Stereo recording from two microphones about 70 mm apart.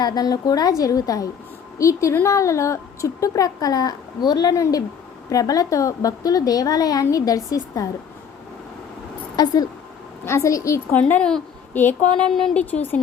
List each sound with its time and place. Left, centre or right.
0.0 s a woman's voice: left
1.8 s a woman's voice: left
5.3 s a woman's voice: left
9.3 s speech: left
10.2 s a woman's voice: left
11.2 s speech: centre
11.7 s speech: left
12.1 s speech: centre
12.5 s speech: left